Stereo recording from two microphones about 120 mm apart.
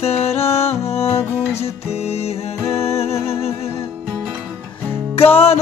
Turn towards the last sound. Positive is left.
turn(degrees=55)  # may be behind; listen again after turning